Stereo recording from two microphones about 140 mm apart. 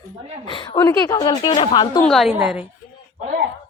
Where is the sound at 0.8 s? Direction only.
20° left (ahead or behind).